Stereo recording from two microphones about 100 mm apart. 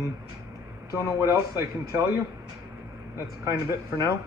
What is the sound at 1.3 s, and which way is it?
Speech, 30° right (ahead or behind).